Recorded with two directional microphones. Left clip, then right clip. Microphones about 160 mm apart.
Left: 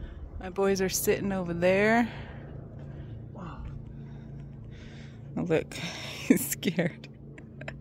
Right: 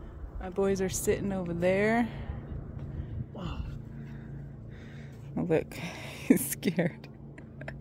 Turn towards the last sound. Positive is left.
turn(degrees=0)  # may be behind; listen again after turning